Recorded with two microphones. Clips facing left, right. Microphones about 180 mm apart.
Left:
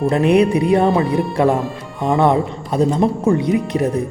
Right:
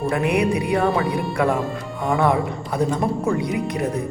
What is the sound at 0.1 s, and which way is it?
A man's voice, 25° left (ahead or behind).